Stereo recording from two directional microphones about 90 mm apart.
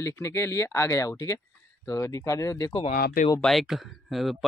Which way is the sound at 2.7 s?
90° left.